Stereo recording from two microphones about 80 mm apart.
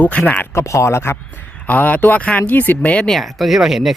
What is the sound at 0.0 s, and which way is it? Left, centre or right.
Speech, centre.